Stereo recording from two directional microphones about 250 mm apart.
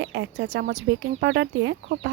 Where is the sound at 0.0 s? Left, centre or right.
Right.